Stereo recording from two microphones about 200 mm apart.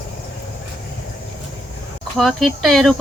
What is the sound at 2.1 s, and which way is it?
Speech, centre (ahead or behind).